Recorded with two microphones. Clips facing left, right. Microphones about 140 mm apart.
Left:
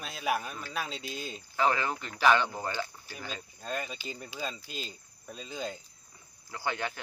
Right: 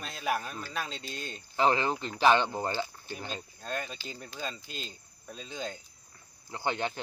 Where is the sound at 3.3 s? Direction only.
Centre (ahead or behind).